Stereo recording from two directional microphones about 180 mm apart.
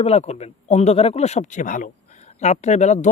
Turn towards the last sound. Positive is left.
turn(degrees=40)  # may be behind; listen again after turning